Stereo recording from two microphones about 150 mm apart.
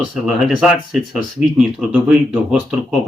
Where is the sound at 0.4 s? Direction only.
Centre (ahead or behind).